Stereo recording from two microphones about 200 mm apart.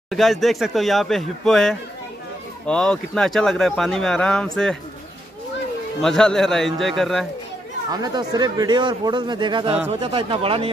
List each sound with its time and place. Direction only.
0.1 s speech: centre (ahead or behind)
5.9 s speech: 5° left (ahead or behind)
7.9 s speech: 20° right (ahead or behind)